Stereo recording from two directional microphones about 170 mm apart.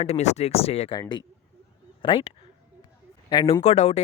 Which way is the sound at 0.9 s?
25° left (ahead or behind).